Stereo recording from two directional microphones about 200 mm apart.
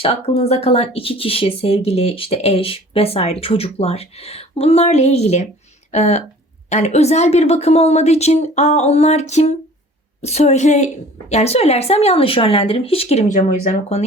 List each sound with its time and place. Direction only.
0.0 s speech: 30° left (ahead or behind)